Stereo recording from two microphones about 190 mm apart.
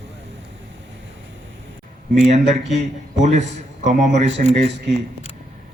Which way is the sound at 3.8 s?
35° right (ahead or behind).